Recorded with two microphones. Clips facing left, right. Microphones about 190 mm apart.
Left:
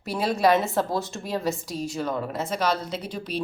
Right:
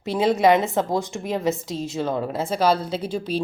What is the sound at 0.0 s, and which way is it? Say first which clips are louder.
A woman's voice: right 4 dB; 20° right (ahead or behind).